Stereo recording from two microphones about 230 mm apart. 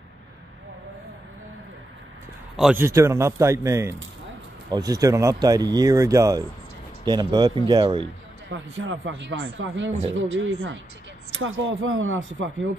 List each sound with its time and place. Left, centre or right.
2.5 s speech: centre
8.5 s speech: right